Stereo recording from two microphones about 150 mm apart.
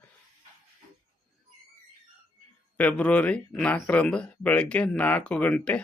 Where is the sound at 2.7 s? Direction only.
10° left (ahead or behind).